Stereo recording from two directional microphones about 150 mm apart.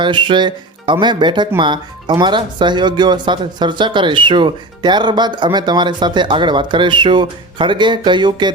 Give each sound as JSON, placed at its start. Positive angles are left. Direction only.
{"t": 0.0, "sound": "speech", "side_deg": -30}